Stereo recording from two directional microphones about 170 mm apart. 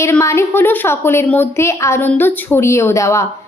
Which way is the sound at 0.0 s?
15° left (ahead or behind).